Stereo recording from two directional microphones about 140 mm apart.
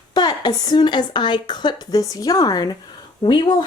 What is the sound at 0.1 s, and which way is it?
A woman's voice, 30° left (ahead or behind).